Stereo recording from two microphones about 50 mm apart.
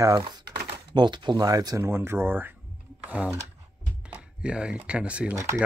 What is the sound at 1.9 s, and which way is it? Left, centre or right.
Speech, right.